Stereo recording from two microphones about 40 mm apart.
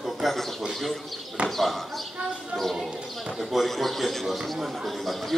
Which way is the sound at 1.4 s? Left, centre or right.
Right.